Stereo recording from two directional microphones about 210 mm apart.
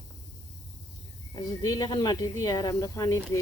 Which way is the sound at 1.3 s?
20° left (ahead or behind).